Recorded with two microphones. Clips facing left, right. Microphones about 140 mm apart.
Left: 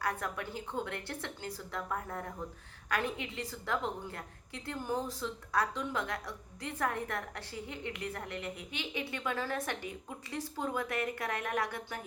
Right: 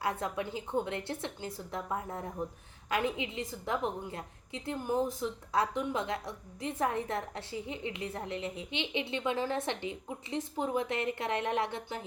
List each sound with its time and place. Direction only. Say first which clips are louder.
0.0 s a woman's voice: right 3 dB; 20° right (ahead or behind)